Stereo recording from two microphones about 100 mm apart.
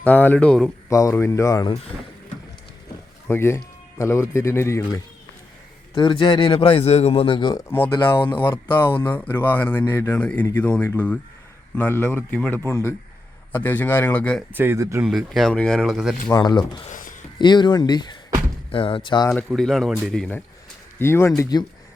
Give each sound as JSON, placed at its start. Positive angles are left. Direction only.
{"t": 0.0, "sound": "speech", "side_deg": 15}
{"t": 0.9, "sound": "speech", "side_deg": 35}
{"t": 3.2, "sound": "speech", "side_deg": 25}
{"t": 4.8, "sound": "speech", "side_deg": 40}
{"t": 5.9, "sound": "speech", "side_deg": 50}
{"t": 6.6, "sound": "a man's voice", "side_deg": 80}
{"t": 8.6, "sound": "speech", "side_deg": 20}
{"t": 14.5, "sound": "speech", "side_deg": -20}
{"t": 15.0, "sound": "speech", "side_deg": 0}
{"t": 15.8, "sound": "speech", "side_deg": -5}
{"t": 16.3, "sound": "speech", "side_deg": 45}
{"t": 18.7, "sound": "speech", "side_deg": 60}
{"t": 19.5, "sound": "speech", "side_deg": 5}
{"t": 21.0, "sound": "speech", "side_deg": 25}